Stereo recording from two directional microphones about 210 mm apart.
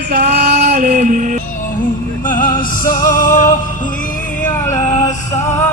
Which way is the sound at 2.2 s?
40° left (ahead or behind).